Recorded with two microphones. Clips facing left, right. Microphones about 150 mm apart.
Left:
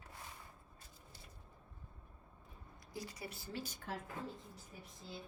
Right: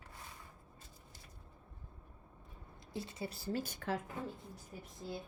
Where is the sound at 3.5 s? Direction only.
45° right (ahead or behind).